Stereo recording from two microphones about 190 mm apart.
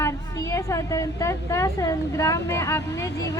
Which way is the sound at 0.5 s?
15° left (ahead or behind).